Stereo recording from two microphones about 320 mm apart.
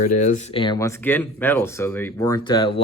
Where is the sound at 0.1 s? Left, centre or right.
Left.